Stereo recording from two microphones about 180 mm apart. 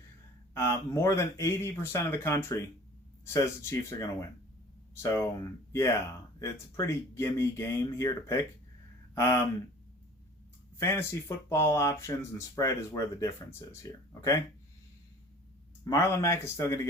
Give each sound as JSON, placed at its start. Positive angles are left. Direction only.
{"t": 0.5, "sound": "speech", "side_deg": 15}
{"t": 10.8, "sound": "speech", "side_deg": 15}
{"t": 15.8, "sound": "speech", "side_deg": 20}